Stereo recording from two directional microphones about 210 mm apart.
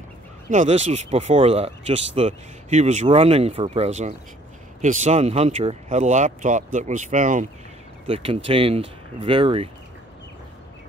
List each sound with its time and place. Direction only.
0.5 s speech: 35° right (ahead or behind)
8.1 s speech: 25° right (ahead or behind)